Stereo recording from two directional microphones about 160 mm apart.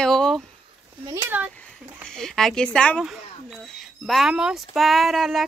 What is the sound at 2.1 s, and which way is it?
Speech, 5° left (ahead or behind).